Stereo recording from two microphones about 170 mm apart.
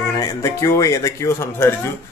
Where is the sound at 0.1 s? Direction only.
20° left (ahead or behind).